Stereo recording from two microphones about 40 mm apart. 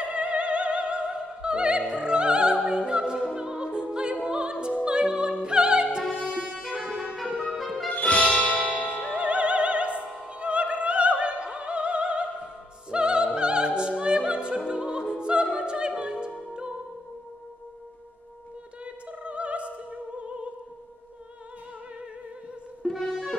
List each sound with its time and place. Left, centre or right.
0.0 s opera: right
4.8 s music: right
5.4 s opera: right
6.1 s music: left
6.5 s music: centre
7.9 s music: left
9.1 s opera: right
19.0 s opera: right
22.8 s music: centre